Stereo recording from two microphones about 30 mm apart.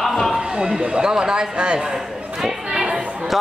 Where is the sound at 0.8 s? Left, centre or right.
Right.